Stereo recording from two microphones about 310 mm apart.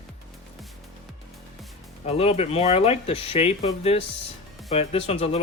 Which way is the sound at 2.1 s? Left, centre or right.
Centre.